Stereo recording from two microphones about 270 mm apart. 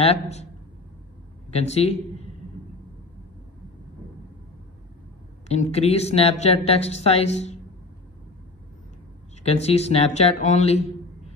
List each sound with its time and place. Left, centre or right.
0.0 s speech: left
1.5 s a man's voice: left
5.5 s speech: left
9.4 s speech: left